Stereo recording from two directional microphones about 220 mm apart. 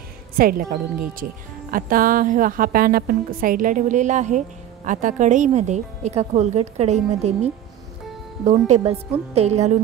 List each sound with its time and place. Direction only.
0.4 s a woman's voice: 40° right (ahead or behind)